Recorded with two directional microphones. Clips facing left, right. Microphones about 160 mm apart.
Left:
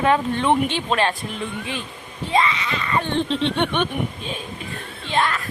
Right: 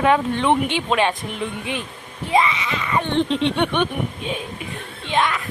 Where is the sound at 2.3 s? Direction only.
20° right (ahead or behind).